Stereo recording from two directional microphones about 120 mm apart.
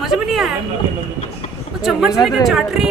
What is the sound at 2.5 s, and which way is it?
Speech, 5° right (ahead or behind).